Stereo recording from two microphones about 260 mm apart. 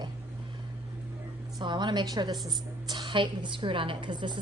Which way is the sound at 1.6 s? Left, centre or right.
Centre.